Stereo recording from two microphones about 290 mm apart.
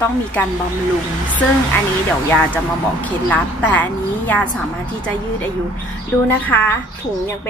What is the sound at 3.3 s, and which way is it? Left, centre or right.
A woman's voice, centre.